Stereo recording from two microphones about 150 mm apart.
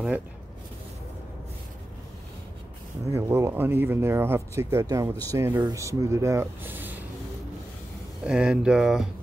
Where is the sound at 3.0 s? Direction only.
15° right (ahead or behind).